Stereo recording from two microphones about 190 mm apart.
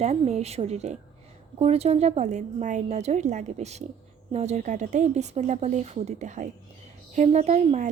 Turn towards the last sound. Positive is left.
turn(degrees=-40)  # may be behind; listen again after turning